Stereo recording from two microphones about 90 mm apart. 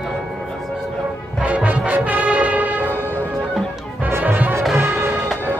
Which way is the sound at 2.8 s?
20° left (ahead or behind).